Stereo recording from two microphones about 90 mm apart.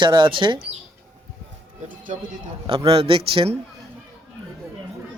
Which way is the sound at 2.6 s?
90° right.